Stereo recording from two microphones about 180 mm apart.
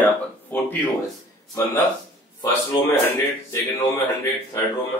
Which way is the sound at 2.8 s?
10° left (ahead or behind).